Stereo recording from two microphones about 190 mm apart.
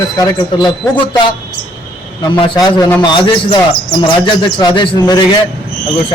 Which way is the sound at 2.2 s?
25° left (ahead or behind).